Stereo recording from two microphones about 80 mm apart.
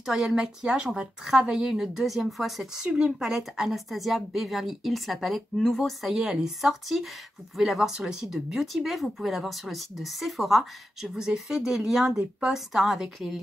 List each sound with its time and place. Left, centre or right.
0.0 s a woman's voice: centre